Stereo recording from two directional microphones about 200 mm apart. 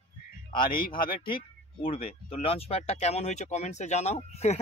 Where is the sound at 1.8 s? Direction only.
25° left (ahead or behind).